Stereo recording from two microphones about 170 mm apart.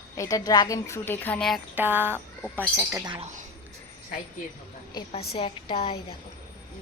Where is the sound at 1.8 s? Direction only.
10° right (ahead or behind).